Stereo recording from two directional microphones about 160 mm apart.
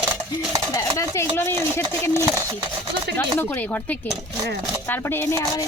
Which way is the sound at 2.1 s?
15° right (ahead or behind).